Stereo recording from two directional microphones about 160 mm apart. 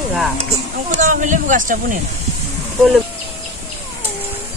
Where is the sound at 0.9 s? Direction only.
50° right (ahead or behind).